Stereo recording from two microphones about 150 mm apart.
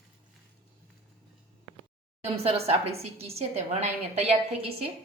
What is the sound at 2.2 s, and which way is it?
A woman's voice, 40° right (ahead or behind).